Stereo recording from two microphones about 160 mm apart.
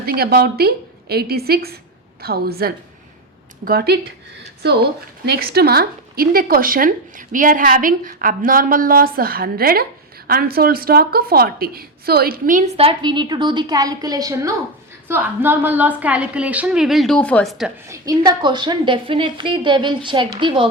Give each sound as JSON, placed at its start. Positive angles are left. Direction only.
{"t": 0.0, "sound": "a woman's voice", "side_deg": -70}
{"t": 12.7, "sound": "a woman's voice", "side_deg": -35}
{"t": 17.8, "sound": "a woman's voice", "side_deg": -20}